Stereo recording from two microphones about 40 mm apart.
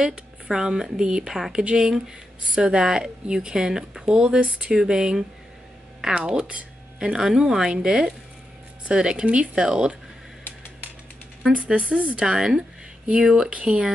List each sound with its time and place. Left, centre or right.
0.5 s speech: centre
6.2 s speech: right
11.5 s speech: right
12.3 s speech: centre